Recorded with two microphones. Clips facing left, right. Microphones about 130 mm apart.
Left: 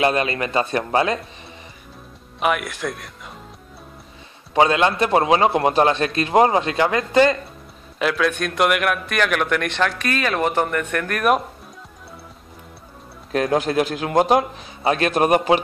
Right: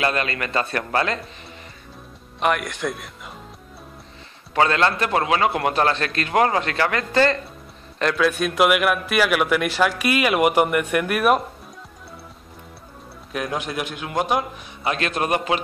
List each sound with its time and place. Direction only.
0.0 s a man's voice: 20° left (ahead or behind)
2.4 s speech: centre (ahead or behind)
4.6 s a man's voice: 15° left (ahead or behind)
8.0 s a man's voice: centre (ahead or behind)
13.4 s a man's voice: 35° left (ahead or behind)